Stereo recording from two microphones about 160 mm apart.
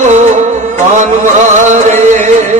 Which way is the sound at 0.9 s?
50° right (ahead or behind).